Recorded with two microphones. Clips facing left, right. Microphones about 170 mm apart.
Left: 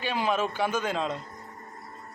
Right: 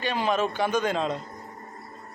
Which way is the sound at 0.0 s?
5° left (ahead or behind).